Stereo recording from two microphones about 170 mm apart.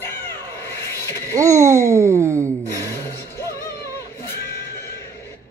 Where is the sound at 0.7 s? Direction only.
15° left (ahead or behind).